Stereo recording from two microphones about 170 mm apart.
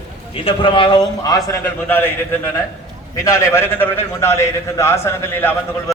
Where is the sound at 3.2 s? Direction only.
15° left (ahead or behind).